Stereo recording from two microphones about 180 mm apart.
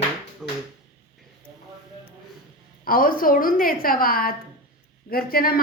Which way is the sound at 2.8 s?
50° left (ahead or behind).